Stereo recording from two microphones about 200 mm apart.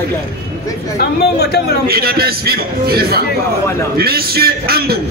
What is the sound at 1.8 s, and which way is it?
A man's voice, 50° right (ahead or behind).